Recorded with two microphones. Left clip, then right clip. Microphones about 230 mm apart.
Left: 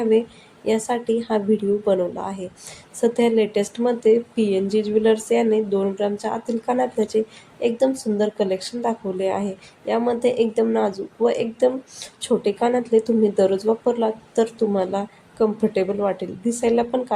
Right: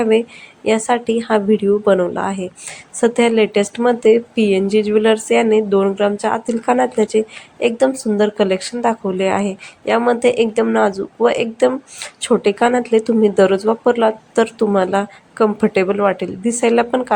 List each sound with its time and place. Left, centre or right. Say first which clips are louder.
0.0 s a woman's voice: right 4 dB; centre